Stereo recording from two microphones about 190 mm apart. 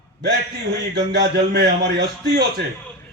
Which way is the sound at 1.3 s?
65° right (ahead or behind).